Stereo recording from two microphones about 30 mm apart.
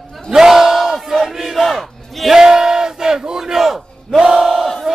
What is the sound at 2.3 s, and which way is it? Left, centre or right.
Battle cry, centre.